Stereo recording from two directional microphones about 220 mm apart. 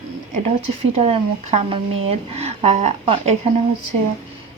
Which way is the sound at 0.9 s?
25° right (ahead or behind).